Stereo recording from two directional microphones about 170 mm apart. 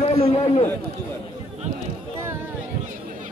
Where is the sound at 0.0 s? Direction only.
40° left (ahead or behind).